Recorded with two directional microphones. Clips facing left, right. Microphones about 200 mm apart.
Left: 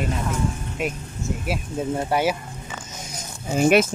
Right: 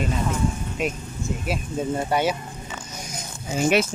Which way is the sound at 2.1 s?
5° left (ahead or behind).